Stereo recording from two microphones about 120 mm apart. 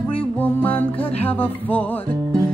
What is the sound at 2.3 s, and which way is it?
Music, 30° right (ahead or behind).